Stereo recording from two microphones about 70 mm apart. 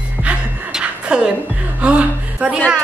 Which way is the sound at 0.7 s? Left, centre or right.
Centre.